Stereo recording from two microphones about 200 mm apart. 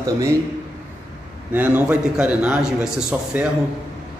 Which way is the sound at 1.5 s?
5° right (ahead or behind).